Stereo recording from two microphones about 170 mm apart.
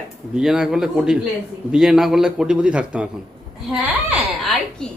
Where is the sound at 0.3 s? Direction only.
5° right (ahead or behind).